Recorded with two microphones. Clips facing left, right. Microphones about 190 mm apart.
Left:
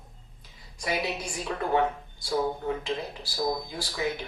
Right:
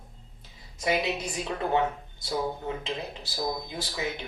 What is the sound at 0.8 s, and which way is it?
A woman's voice, 20° right (ahead or behind).